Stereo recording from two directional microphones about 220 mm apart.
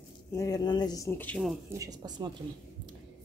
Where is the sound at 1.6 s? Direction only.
15° right (ahead or behind).